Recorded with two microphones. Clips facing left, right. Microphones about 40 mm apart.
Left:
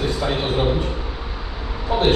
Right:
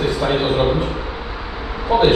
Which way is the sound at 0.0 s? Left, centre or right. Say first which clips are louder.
Right 4 dB; centre.